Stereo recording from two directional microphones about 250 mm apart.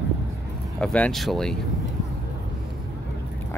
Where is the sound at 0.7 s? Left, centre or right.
Centre.